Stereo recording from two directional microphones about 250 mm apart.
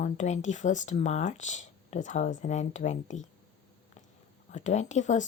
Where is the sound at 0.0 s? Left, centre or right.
Left.